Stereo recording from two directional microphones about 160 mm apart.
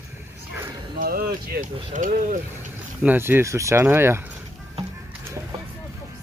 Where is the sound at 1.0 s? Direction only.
70° right (ahead or behind).